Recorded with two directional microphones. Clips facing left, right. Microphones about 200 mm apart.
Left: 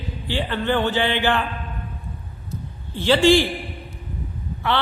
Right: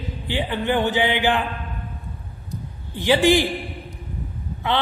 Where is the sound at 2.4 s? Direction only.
15° right (ahead or behind).